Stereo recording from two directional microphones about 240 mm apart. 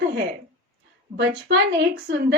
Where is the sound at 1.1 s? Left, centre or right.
Right.